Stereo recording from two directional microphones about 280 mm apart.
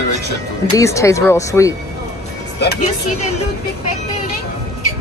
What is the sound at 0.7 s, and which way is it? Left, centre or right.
Speech, centre.